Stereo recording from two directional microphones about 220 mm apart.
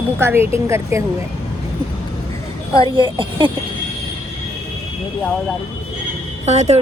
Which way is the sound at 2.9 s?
25° right (ahead or behind).